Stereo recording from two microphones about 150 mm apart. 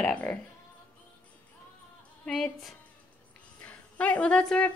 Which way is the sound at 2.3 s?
Centre (ahead or behind).